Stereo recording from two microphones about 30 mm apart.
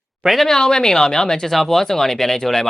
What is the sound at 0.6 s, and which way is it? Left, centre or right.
Speech, left.